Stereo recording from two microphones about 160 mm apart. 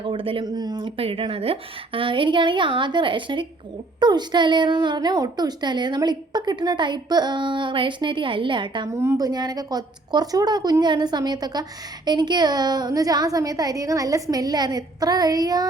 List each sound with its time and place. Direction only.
0.0 s a woman's voice: 35° right (ahead or behind)
8.9 s a woman's voice: 15° right (ahead or behind)